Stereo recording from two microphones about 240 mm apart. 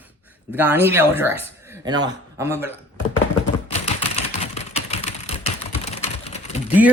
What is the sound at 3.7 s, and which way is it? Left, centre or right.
Typing, left.